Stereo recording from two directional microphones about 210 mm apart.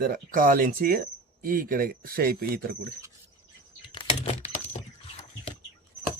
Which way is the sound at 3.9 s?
25° left (ahead or behind).